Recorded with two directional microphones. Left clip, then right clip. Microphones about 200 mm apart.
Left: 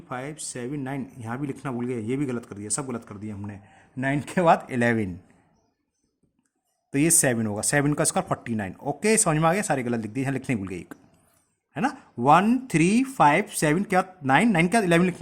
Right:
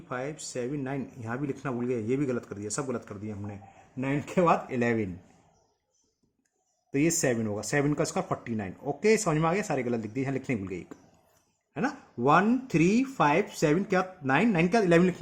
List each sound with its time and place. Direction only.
0.1 s speech: 30° left (ahead or behind)
3.9 s speech: 50° left (ahead or behind)
6.9 s speech: 40° left (ahead or behind)